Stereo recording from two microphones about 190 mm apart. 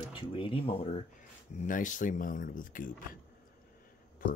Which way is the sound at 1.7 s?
45° left (ahead or behind).